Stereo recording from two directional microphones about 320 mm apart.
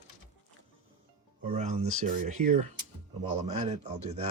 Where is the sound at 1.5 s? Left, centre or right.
Right.